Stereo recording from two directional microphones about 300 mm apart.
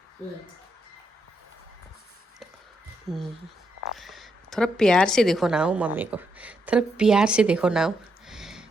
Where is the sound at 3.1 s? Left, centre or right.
Centre.